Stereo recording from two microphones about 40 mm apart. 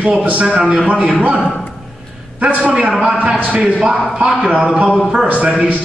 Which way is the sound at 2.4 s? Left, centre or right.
Right.